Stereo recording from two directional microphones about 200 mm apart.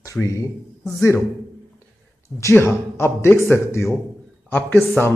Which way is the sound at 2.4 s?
10° left (ahead or behind).